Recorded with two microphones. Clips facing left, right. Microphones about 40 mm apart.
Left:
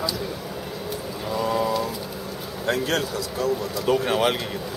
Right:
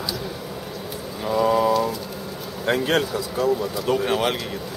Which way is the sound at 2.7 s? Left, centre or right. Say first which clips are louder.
Right 3 dB; right.